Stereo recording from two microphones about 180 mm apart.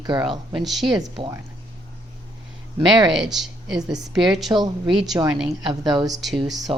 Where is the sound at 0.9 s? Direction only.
20° right (ahead or behind).